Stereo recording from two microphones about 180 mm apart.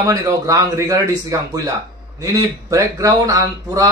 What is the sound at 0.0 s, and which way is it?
A man's voice, 20° right (ahead or behind).